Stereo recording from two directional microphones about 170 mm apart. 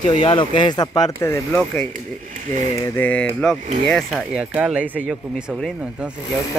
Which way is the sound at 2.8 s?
10° left (ahead or behind).